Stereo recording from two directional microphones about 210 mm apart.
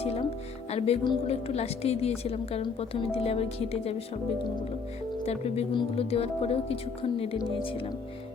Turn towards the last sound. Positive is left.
turn(degrees=25)  # may be behind; listen again after turning